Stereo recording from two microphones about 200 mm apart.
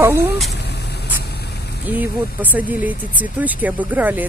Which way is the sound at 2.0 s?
10° right (ahead or behind).